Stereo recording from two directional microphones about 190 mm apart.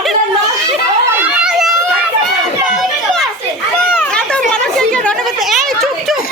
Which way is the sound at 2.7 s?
Centre (ahead or behind).